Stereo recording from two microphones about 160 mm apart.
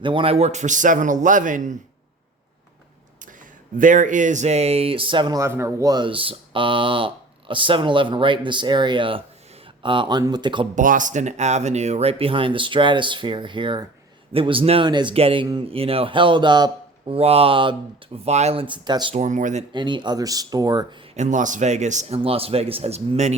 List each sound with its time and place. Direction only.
0.0 s a man's voice: 30° right (ahead or behind); by 1.7 s 55° right (ahead or behind)
3.8 s speech: 55° right (ahead or behind); by 10.7 s 30° right (ahead or behind)
10.8 s speech: 55° right (ahead or behind); by 18.2 s 30° right (ahead or behind)
18.3 s speech: 45° right (ahead or behind)
19.1 s a man's voice: 50° right (ahead or behind)
19.7 s speech: 30° right (ahead or behind)
21.2 s a man's voice: 50° right (ahead or behind)
22.2 s speech: 35° right (ahead or behind)